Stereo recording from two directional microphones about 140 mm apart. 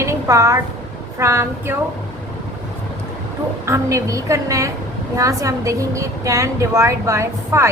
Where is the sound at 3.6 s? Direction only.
20° right (ahead or behind).